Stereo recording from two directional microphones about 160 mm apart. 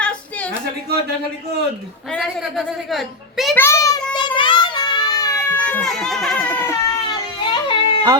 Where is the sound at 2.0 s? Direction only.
Centre (ahead or behind).